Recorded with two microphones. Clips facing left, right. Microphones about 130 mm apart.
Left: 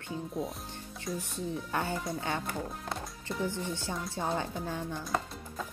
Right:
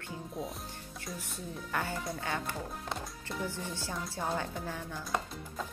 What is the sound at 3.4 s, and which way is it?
A woman's voice, 20° left (ahead or behind).